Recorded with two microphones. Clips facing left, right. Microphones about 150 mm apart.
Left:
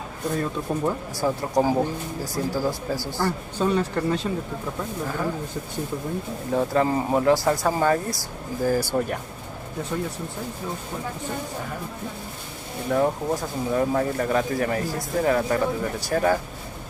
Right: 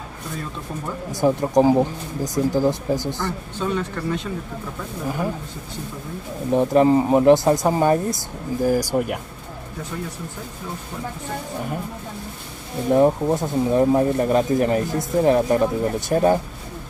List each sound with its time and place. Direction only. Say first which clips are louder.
1.1 s speech: right 8 dB; 20° right (ahead or behind)
3.5 s speech: left 2 dB; 35° left (ahead or behind)
5.0 s speech: right 3 dB; 15° right (ahead or behind)
6.5 s speech: right 6 dB; 20° right (ahead or behind)
12.9 s speech: right 6 dB; 25° right (ahead or behind)